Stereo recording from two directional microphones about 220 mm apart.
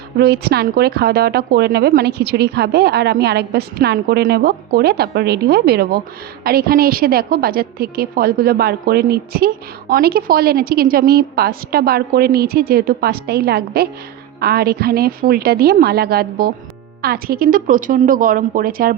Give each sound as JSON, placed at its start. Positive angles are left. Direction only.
{"t": 0.2, "sound": "a woman's voice", "side_deg": -45}